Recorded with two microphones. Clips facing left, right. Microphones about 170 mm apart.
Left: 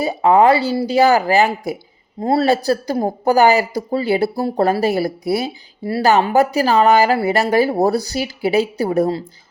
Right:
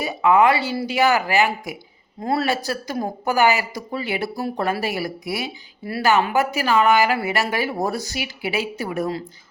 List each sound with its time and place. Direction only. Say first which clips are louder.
0.0 s speech: left 4 dB; 35° left (ahead or behind)